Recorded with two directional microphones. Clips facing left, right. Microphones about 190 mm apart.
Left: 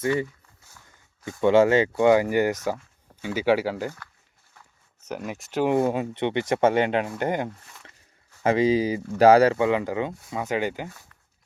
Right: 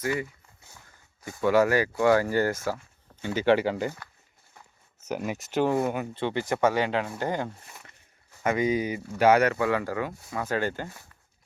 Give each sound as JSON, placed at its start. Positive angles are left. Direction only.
{"t": 0.0, "sound": "speech", "side_deg": 25}
{"t": 1.4, "sound": "speech", "side_deg": 25}
{"t": 5.0, "sound": "speech", "side_deg": -5}
{"t": 5.8, "sound": "speech", "side_deg": 25}
{"t": 8.4, "sound": "speech", "side_deg": 30}